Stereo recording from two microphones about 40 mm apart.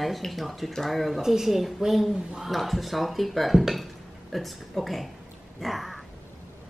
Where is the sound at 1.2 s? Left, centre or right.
Centre.